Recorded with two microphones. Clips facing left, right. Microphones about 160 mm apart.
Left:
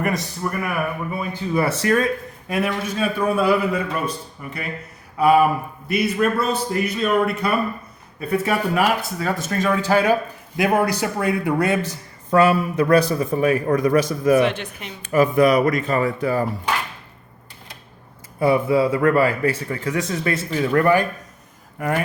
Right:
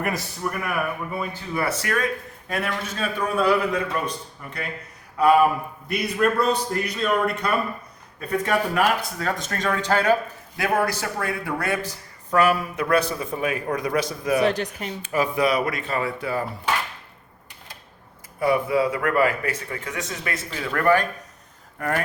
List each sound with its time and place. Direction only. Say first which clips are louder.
0.0 s a man's voice: left 3 dB; centre (ahead or behind)
1.3 s speech: left 9 dB; 25° left (ahead or behind)
2.5 s a man's voice: left 5 dB; 10° left (ahead or behind); by 14.3 s 50° left (ahead or behind)
14.4 s speech: even; 40° right (ahead or behind)
15.0 s speech: left 7 dB; 50° left (ahead or behind)
18.3 s speech: left 3 dB; 25° left (ahead or behind)
20.8 s a man's voice: left 2 dB; 10° left (ahead or behind)